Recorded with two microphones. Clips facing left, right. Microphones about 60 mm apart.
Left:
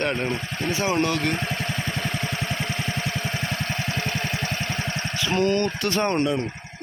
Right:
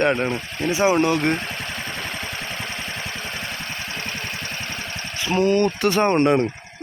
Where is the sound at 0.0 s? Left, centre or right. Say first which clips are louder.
Right 5 dB; centre.